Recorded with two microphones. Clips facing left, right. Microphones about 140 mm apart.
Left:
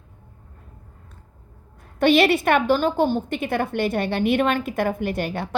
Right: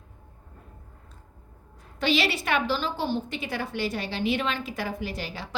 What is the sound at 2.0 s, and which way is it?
A woman's voice, 55° left (ahead or behind).